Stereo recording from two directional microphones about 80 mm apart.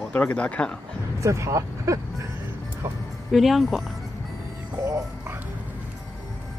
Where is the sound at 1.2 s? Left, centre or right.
Right.